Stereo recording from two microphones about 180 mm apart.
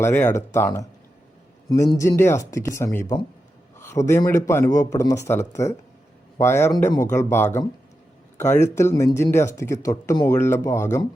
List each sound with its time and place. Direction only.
0.0 s speech: 10° left (ahead or behind)